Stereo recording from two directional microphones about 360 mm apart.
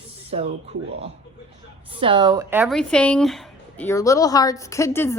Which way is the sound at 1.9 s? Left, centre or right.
Centre.